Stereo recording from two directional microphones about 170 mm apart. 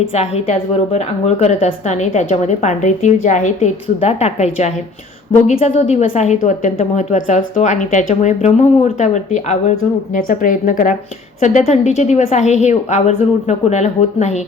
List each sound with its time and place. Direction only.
0.1 s a woman's voice: 40° left (ahead or behind)